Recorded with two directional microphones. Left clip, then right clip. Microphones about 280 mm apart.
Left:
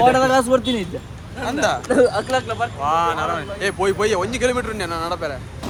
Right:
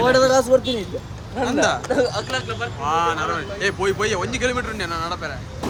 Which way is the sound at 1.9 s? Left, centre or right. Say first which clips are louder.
Left 4 dB; left.